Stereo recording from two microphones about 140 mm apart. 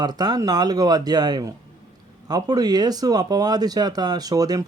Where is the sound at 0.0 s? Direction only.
30° right (ahead or behind).